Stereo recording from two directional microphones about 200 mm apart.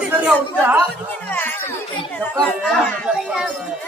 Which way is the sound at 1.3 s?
10° left (ahead or behind).